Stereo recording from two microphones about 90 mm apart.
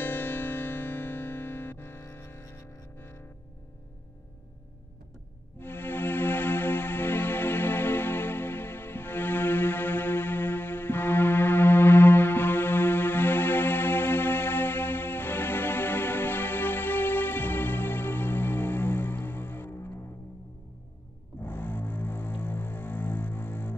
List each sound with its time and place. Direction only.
0.0 s music: 20° left (ahead or behind)
5.6 s music: 25° left (ahead or behind)
21.4 s music: 20° left (ahead or behind)